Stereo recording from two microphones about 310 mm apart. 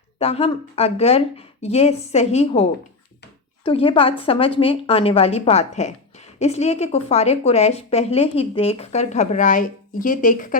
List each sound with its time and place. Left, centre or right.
0.2 s a woman's voice: centre